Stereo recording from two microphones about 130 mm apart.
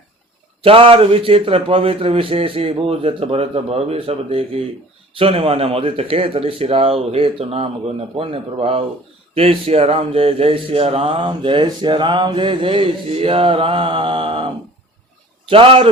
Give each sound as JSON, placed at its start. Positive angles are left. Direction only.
{"t": 0.6, "sound": "speech", "side_deg": -45}